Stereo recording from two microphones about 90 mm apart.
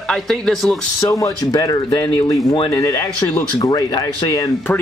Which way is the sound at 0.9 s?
40° left (ahead or behind).